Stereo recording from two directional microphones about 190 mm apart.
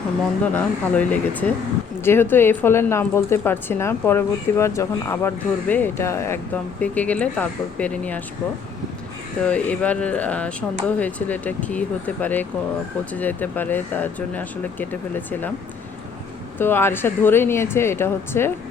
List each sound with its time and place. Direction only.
0.4 s speech: 10° left (ahead or behind)
9.4 s speech: 5° left (ahead or behind)
16.6 s speech: 10° left (ahead or behind)